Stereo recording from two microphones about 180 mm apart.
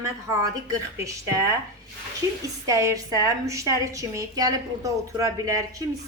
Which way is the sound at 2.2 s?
20° right (ahead or behind).